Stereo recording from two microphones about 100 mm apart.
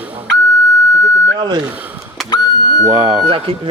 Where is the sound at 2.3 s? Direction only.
45° left (ahead or behind).